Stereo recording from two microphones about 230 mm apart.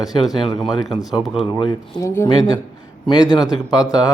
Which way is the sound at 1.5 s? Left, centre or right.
Centre.